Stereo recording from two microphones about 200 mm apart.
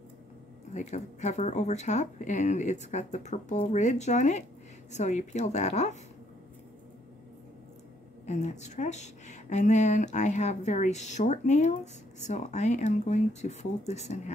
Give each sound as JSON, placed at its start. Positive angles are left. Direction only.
{"t": 0.7, "sound": "a woman's voice", "side_deg": 35}
{"t": 8.3, "sound": "a woman's voice", "side_deg": 35}